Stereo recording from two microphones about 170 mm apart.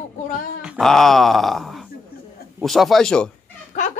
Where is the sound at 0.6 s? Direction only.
Centre (ahead or behind).